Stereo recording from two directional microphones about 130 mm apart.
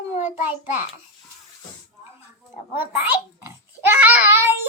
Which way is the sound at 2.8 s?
15° right (ahead or behind).